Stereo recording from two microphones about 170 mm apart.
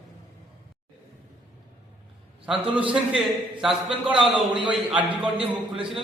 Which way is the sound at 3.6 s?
5° right (ahead or behind).